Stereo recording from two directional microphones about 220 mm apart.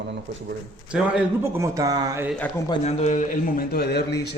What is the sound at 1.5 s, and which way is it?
Speech, 15° right (ahead or behind).